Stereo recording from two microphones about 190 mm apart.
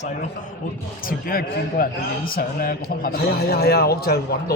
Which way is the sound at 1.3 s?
50° left (ahead or behind).